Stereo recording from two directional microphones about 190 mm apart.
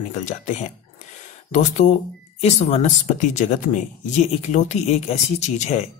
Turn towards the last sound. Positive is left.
turn(degrees=35)  # may be behind; listen again after turning